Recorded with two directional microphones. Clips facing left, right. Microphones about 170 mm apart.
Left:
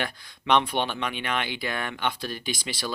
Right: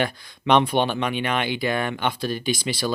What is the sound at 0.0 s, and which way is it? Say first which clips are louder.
Speech: right 7 dB; 15° right (ahead or behind).